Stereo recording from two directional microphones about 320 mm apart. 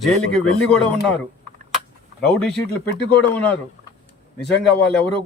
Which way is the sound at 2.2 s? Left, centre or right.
Centre.